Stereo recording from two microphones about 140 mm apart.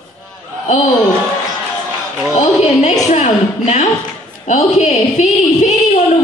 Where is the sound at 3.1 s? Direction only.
55° left (ahead or behind).